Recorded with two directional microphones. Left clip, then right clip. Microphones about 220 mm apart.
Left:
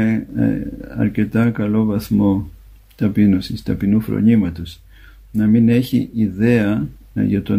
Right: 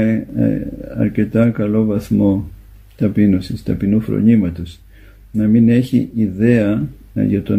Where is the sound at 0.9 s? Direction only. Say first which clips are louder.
Right 3 dB; 25° left (ahead or behind).